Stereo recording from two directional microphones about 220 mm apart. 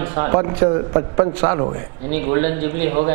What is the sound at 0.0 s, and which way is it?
A man's voice, 15° right (ahead or behind).